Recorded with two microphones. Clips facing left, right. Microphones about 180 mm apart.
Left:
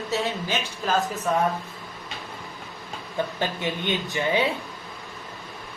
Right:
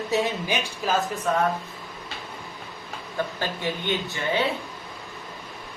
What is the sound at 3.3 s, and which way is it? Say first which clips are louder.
Speech: left 1 dB; 20° left (ahead or behind).